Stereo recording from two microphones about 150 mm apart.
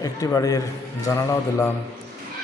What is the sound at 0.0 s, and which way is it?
A man's voice, 25° left (ahead or behind).